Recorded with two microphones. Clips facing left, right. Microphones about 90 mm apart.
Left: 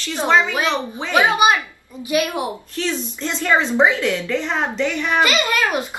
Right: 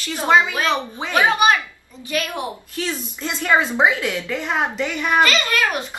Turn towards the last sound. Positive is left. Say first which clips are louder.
# left 2 dB
turn(degrees=20)  # may be behind; listen again after turning